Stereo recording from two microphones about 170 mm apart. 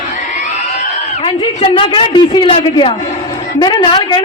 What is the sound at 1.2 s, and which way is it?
A man's voice, 30° left (ahead or behind).